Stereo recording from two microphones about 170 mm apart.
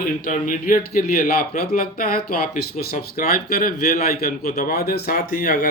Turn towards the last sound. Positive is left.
turn(degrees=55)  # may be behind; listen again after turning